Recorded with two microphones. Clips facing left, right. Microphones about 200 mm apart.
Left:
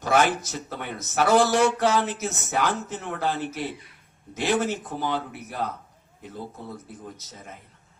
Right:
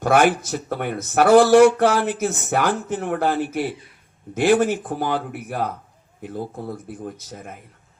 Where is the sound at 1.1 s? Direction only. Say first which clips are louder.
Right 8 dB; 50° right (ahead or behind).